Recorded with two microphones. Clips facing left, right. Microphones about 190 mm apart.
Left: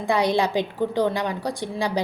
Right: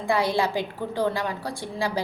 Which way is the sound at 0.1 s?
20° left (ahead or behind).